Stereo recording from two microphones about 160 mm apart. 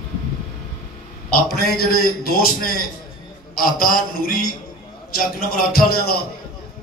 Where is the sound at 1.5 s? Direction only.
70° left (ahead or behind).